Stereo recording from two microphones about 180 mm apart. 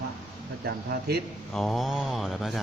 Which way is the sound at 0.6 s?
60° right (ahead or behind).